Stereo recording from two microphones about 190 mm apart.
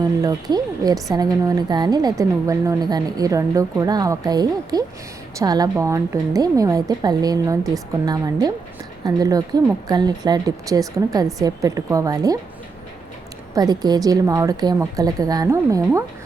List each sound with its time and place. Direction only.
0.2 s a woman's voice: 20° right (ahead or behind)
13.6 s a woman's voice: 20° right (ahead or behind)